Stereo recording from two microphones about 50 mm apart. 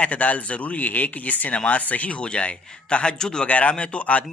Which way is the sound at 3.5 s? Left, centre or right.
Left.